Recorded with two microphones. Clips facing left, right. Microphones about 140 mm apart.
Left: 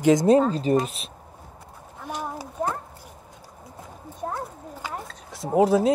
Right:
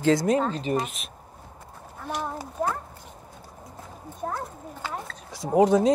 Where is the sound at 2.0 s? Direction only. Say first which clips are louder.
Right 1 dB; 10° left (ahead or behind).